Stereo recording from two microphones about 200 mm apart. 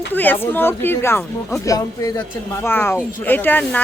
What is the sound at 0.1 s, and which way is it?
Speech, 10° left (ahead or behind).